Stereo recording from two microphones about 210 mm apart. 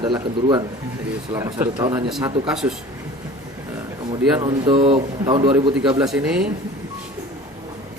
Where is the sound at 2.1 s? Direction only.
5° right (ahead or behind).